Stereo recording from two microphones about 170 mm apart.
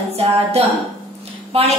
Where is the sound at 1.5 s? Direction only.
35° right (ahead or behind).